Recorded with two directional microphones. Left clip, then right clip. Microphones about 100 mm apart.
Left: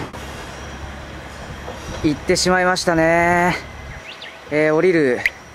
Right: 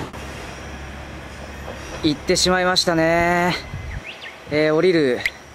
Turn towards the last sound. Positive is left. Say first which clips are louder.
# left 1 dB
turn(degrees=15)  # may be behind; listen again after turning